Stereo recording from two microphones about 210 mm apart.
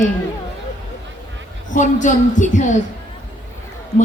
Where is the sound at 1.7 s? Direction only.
35° left (ahead or behind).